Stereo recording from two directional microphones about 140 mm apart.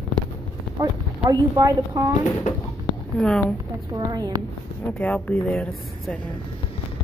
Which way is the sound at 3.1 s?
5° left (ahead or behind).